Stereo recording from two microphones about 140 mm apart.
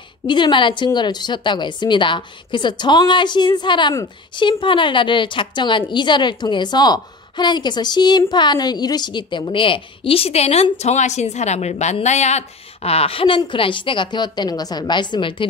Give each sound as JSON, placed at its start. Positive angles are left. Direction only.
{"t": 0.3, "sound": "a woman's voice", "side_deg": 35}